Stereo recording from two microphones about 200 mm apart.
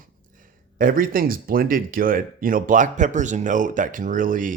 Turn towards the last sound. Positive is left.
turn(degrees=-40)  # may be behind; listen again after turning